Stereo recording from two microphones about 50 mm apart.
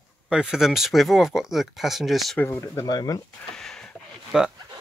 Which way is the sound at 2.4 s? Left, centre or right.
Left.